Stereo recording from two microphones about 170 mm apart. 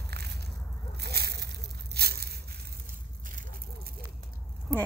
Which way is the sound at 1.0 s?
70° right (ahead or behind).